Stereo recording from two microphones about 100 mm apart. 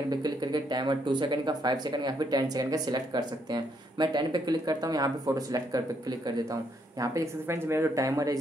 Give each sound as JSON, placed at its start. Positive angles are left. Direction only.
{"t": 0.1, "sound": "speech", "side_deg": -45}